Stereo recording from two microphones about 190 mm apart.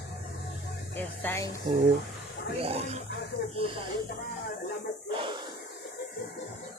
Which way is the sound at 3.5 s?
30° right (ahead or behind).